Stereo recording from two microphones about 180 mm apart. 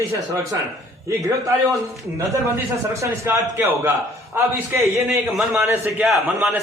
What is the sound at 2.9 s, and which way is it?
A man's voice, 15° right (ahead or behind).